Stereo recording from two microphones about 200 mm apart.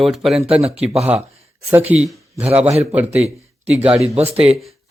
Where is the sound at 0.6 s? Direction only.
30° right (ahead or behind).